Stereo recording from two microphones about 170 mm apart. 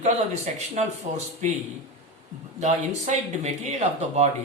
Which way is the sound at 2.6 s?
45° right (ahead or behind).